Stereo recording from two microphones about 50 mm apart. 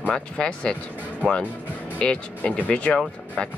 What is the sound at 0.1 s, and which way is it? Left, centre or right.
Speech, centre.